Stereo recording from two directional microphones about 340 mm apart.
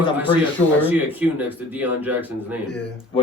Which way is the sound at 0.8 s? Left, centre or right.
Centre.